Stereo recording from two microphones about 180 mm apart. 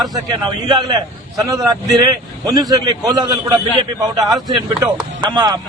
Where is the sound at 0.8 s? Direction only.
25° right (ahead or behind).